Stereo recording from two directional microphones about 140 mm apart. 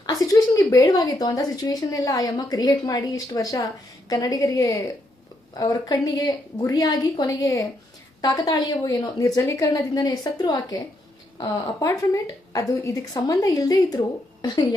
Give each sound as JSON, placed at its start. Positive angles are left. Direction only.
{"t": 0.0, "sound": "speech", "side_deg": 25}